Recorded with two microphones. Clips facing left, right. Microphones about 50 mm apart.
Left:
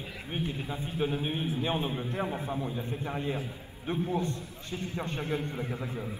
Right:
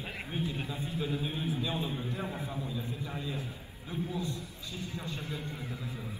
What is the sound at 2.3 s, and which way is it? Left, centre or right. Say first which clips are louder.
Speech: left 5 dB; left.